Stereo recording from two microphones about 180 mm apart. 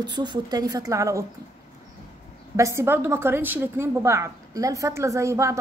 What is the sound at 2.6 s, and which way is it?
A woman's voice, 15° right (ahead or behind).